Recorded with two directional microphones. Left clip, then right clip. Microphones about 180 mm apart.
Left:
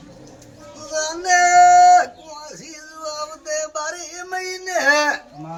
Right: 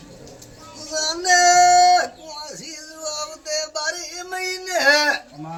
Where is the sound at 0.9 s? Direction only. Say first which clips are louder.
Even; 5° left (ahead or behind).